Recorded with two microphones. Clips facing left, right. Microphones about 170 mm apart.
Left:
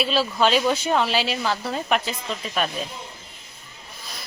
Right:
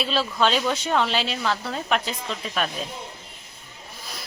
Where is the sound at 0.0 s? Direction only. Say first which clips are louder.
Left 2 dB; 5° left (ahead or behind).